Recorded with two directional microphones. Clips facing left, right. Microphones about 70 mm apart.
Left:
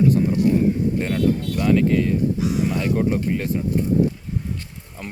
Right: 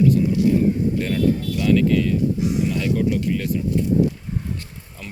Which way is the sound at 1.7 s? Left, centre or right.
Left.